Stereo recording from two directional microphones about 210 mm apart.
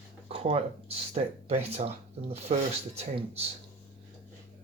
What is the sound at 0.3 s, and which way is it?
Speech, 25° right (ahead or behind).